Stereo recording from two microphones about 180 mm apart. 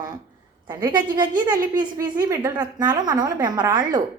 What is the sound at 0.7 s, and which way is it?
A woman's voice, 20° right (ahead or behind).